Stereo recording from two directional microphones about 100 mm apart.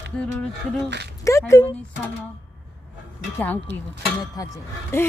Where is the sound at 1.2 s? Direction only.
30° left (ahead or behind).